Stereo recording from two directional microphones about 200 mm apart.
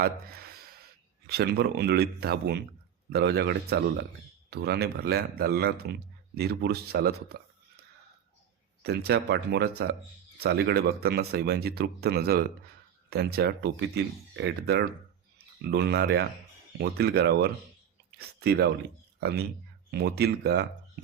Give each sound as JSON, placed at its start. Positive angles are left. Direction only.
{"t": 0.0, "sound": "speech", "side_deg": -50}
{"t": 8.8, "sound": "speech", "side_deg": -55}
{"t": 19.9, "sound": "speech", "side_deg": -55}